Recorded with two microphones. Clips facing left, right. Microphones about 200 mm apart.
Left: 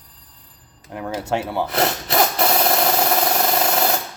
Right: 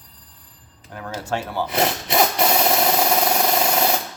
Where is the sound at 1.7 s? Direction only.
Centre (ahead or behind).